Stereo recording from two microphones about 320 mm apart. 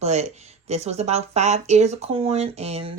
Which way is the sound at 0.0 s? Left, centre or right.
Centre.